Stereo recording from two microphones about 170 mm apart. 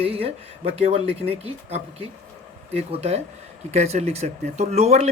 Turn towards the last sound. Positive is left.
turn(degrees=-40)  # may be behind; listen again after turning